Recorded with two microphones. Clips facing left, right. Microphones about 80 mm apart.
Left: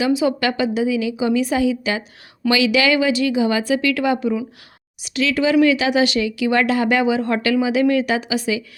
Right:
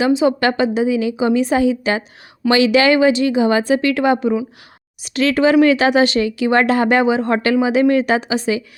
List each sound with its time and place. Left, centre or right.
0.0 s speech: right
5.0 s speech: right